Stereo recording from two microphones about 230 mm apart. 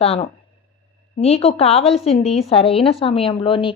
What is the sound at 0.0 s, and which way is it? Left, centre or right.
A woman's voice, left.